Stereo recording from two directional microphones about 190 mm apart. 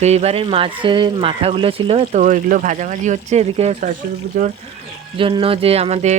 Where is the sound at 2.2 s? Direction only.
45° right (ahead or behind).